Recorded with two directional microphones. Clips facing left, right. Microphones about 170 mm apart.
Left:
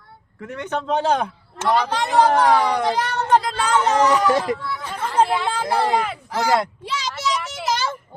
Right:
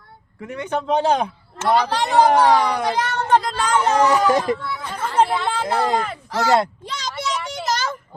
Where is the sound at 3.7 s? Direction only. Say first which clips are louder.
Right 1 dB; 15° right (ahead or behind).